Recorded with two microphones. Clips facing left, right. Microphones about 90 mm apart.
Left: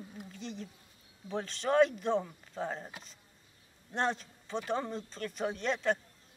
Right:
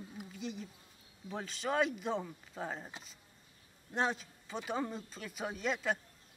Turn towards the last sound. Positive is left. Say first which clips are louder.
# left 4 dB
turn(degrees=-5)  # may be behind; listen again after turning